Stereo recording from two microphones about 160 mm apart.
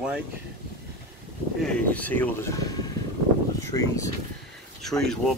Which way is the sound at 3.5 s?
20° left (ahead or behind).